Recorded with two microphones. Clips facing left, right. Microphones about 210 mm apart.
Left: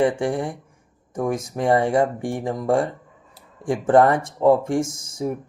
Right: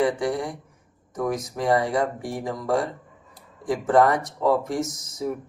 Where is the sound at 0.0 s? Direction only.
25° left (ahead or behind).